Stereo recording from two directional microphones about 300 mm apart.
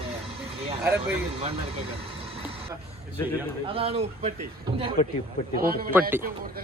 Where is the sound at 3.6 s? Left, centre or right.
Centre.